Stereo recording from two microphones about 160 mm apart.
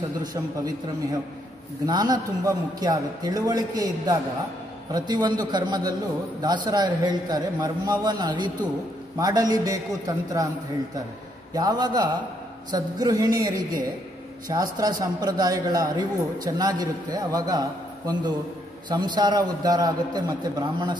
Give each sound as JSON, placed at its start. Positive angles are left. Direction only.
{"t": 0.2, "sound": "a man's voice", "side_deg": -25}
{"t": 1.9, "sound": "a man's voice", "side_deg": -25}
{"t": 11.5, "sound": "a man's voice", "side_deg": -25}